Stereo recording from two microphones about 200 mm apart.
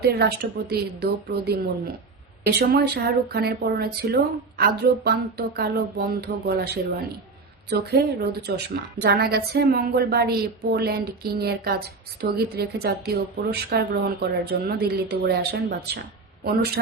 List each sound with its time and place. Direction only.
0.0 s speech: 55° right (ahead or behind)